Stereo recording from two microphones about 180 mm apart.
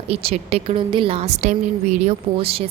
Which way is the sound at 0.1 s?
35° right (ahead or behind).